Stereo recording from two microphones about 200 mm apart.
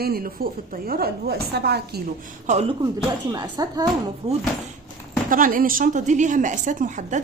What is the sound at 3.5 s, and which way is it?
Speech, 20° right (ahead or behind).